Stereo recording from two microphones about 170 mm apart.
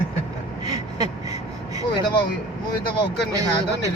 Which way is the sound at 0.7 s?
20° right (ahead or behind).